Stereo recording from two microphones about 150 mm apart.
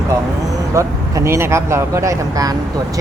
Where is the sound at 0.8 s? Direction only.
20° right (ahead or behind).